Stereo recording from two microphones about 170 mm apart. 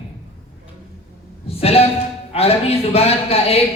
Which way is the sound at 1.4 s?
35° left (ahead or behind).